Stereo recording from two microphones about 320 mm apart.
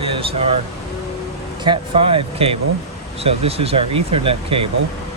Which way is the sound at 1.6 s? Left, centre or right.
Centre.